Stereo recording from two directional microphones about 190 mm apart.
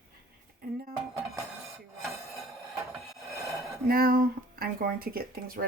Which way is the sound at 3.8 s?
50° right (ahead or behind).